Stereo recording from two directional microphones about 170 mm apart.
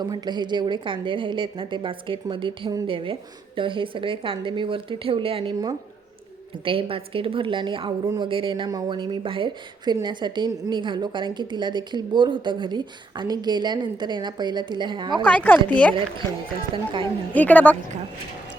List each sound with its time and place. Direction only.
0.0 s a woman's voice: 25° right (ahead or behind)
15.1 s speech: 10° left (ahead or behind)
16.7 s a woman's voice: 30° right (ahead or behind)
17.3 s speech: 10° left (ahead or behind)